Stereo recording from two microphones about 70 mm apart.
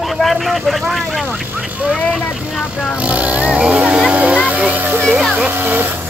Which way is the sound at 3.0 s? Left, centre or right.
Right.